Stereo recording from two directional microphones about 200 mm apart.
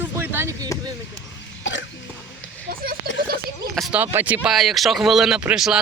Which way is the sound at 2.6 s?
50° right (ahead or behind).